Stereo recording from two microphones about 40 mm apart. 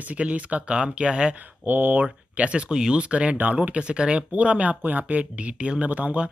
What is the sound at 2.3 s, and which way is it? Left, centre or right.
Speech, right.